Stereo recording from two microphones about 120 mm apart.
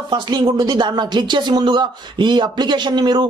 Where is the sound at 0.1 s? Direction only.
35° right (ahead or behind).